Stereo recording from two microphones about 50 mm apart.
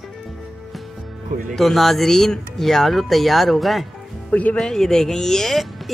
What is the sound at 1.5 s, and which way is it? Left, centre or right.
Speech, centre.